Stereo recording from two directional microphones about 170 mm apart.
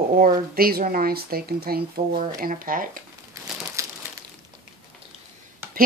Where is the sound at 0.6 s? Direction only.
60° right (ahead or behind).